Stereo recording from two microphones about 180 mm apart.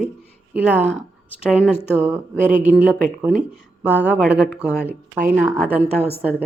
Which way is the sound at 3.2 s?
5° right (ahead or behind).